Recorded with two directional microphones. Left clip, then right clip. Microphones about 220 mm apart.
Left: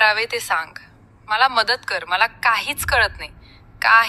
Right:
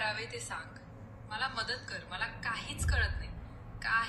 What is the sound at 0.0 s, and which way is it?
A woman's voice, 45° left (ahead or behind).